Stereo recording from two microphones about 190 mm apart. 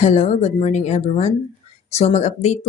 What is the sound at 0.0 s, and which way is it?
Speech, 35° left (ahead or behind).